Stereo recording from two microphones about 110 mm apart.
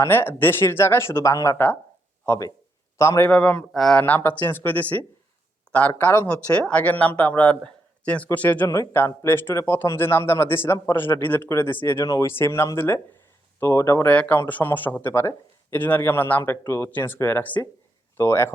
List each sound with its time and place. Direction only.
0.0 s speech: 20° left (ahead or behind)
3.2 s speech: 10° left (ahead or behind)
4.0 s speech: 15° left (ahead or behind)
5.7 s a sound: 10° left (ahead or behind)
6.0 s speech: 20° left (ahead or behind)
8.6 s speech: 25° left (ahead or behind)
14.1 s speech: 15° left (ahead or behind)